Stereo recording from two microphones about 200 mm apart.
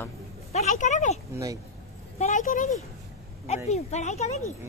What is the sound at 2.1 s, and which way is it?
Speech, 35° left (ahead or behind).